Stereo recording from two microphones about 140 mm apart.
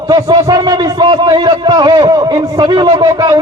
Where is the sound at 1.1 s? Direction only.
30° right (ahead or behind).